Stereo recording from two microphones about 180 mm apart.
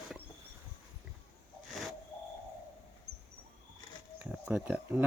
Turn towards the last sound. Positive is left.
turn(degrees=-5)  # may be behind; listen again after turning